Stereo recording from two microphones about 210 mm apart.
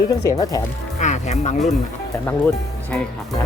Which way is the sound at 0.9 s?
35° left (ahead or behind).